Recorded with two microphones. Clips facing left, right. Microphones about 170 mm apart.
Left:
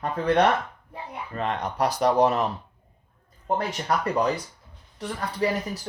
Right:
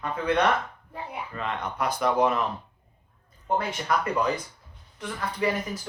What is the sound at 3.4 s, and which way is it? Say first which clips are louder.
Speech: left 1 dB; 40° left (ahead or behind).